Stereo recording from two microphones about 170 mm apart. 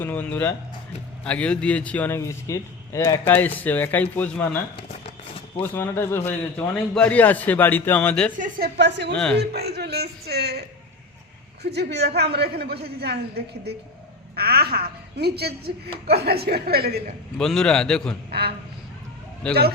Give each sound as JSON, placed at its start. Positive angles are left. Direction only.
{"t": 0.0, "sound": "a man's voice", "side_deg": 10}
{"t": 5.7, "sound": "a man's voice", "side_deg": 15}
{"t": 8.4, "sound": "speech", "side_deg": -60}
{"t": 9.1, "sound": "a man's voice", "side_deg": 5}
{"t": 9.4, "sound": "speech", "side_deg": -70}
{"t": 17.3, "sound": "a man's voice", "side_deg": 5}
{"t": 18.3, "sound": "a sound", "side_deg": -70}
{"t": 19.4, "sound": "a man's voice", "side_deg": 5}